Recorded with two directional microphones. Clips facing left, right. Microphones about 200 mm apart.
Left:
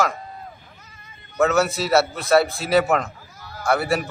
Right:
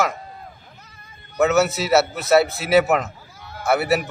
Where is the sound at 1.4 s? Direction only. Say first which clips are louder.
Right 1 dB; 5° right (ahead or behind).